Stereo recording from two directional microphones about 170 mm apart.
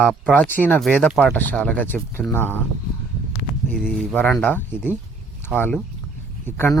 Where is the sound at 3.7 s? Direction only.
Centre (ahead or behind).